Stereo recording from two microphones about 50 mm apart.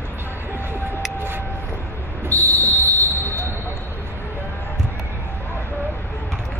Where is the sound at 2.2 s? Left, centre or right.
Left.